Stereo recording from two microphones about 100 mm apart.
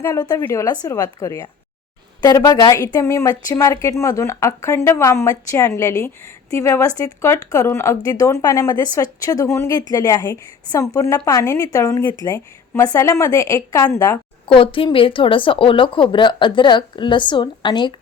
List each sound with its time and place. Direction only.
0.2 s a woman's voice: 40° left (ahead or behind)
14.4 s a woman's voice: 60° left (ahead or behind)